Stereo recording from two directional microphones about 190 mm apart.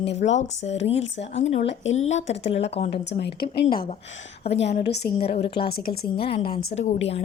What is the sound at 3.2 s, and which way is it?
Speech, 55° left (ahead or behind).